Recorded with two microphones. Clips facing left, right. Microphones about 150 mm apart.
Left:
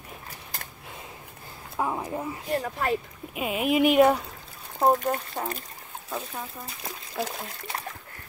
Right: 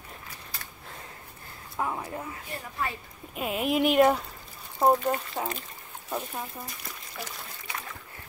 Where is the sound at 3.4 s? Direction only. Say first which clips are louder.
Left 3 dB; 5° left (ahead or behind).